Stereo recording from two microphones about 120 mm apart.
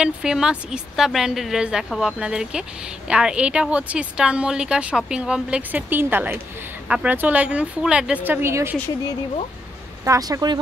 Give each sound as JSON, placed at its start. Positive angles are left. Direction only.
{"t": 0.0, "sound": "a woman's voice", "side_deg": -5}
{"t": 10.0, "sound": "speech", "side_deg": -25}